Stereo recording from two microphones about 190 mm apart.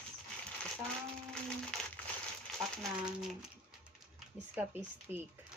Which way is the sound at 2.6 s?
15° right (ahead or behind).